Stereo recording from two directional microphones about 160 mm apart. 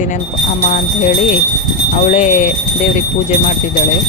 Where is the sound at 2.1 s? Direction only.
50° left (ahead or behind).